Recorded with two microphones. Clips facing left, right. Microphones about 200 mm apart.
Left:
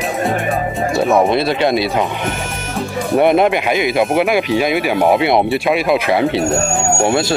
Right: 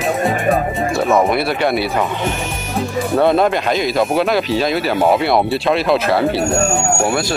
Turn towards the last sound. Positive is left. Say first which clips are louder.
# left 2 dB
turn(degrees=25)  # may be behind; listen again after turning